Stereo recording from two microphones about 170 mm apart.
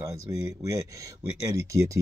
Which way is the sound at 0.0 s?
20° right (ahead or behind).